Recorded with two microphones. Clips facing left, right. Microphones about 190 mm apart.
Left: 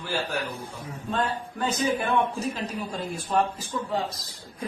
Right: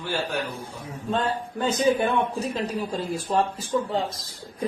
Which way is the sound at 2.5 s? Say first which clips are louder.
Right 4 dB; 30° right (ahead or behind).